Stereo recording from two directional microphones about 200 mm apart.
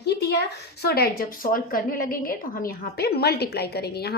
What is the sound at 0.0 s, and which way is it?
A woman's voice, 55° left (ahead or behind).